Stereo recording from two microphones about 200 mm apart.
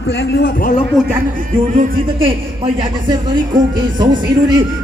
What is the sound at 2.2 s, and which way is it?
Speech, 25° right (ahead or behind).